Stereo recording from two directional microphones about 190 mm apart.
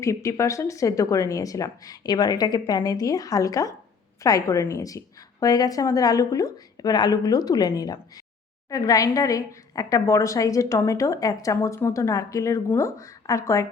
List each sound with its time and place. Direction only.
0.0 s a woman's voice: 15° left (ahead or behind)